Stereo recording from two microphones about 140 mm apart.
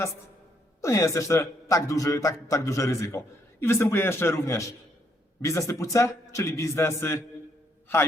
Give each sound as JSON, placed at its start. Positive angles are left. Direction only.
{"t": 0.8, "sound": "a man's voice", "side_deg": 20}